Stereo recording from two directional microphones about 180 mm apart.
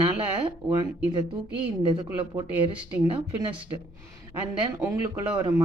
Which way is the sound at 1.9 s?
30° right (ahead or behind).